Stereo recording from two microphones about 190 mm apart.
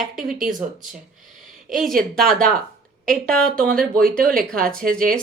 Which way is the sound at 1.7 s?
Centre (ahead or behind).